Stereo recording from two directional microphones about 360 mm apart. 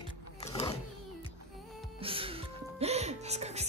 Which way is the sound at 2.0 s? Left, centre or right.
Centre.